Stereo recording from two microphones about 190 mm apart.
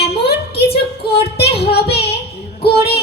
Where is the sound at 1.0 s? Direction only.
60° left (ahead or behind).